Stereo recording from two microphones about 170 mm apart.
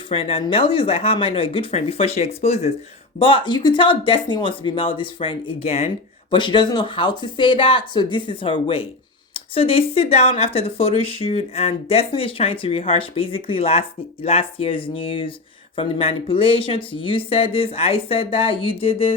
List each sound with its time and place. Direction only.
0.1 s speech: 35° left (ahead or behind)